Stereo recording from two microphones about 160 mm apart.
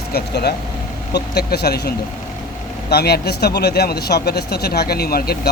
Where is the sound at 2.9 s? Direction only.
90° left.